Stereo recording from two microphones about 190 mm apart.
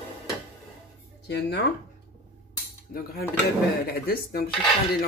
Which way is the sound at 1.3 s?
60° left (ahead or behind).